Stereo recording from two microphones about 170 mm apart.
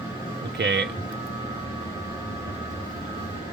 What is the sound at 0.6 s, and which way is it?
Speech, 90° right.